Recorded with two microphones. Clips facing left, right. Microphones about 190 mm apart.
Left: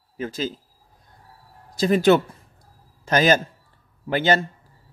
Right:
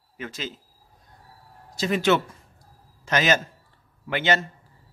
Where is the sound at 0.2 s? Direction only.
35° left (ahead or behind).